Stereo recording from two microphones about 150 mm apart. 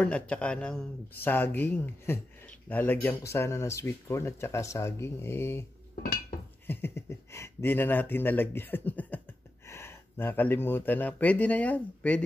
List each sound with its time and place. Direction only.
0.0 s speech: 5° left (ahead or behind)
6.7 s speech: 15° left (ahead or behind)